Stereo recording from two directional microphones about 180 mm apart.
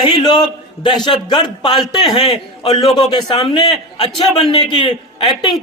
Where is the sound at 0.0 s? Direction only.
25° left (ahead or behind).